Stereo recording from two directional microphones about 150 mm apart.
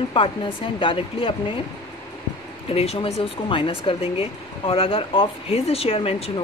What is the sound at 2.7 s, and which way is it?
Speech, 40° left (ahead or behind).